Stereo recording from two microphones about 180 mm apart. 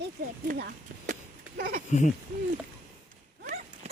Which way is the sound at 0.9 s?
50° right (ahead or behind).